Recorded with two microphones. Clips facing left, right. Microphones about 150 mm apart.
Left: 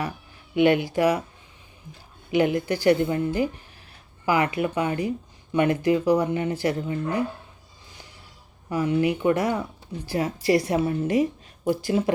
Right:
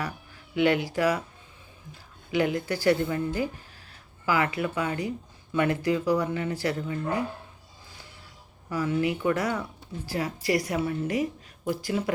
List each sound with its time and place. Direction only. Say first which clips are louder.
0.5 s speech: left 4 dB; 25° left (ahead or behind)
2.3 s speech: left 4 dB; 25° left (ahead or behind)
8.7 s speech: left 4 dB; 20° left (ahead or behind)